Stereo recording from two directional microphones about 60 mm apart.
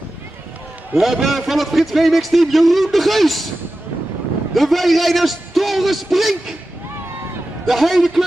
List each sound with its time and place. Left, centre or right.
0.9 s a man's voice: centre
4.6 s a man's voice: centre
7.6 s a man's voice: centre